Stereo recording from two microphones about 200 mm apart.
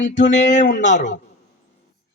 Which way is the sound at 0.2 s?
40° left (ahead or behind).